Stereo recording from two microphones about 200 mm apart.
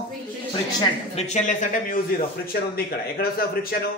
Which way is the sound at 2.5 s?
50° left (ahead or behind).